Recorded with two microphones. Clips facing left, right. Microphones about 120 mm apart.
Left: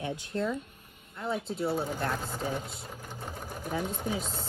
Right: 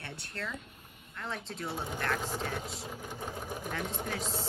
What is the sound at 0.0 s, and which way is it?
Speech, 15° left (ahead or behind).